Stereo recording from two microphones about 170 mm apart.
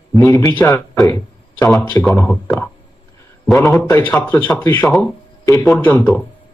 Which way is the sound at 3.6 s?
Centre (ahead or behind).